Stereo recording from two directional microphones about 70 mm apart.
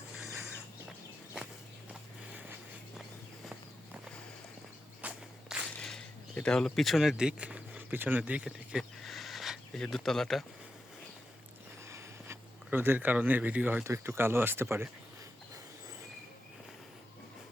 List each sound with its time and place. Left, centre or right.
5.0 s walk: right
5.8 s speech: centre
9.0 s a sound: centre
9.7 s speech: centre
11.9 s a sound: right
12.7 s speech: right
13.8 s speech: right